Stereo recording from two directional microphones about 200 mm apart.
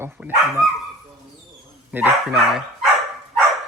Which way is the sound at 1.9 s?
10° right (ahead or behind).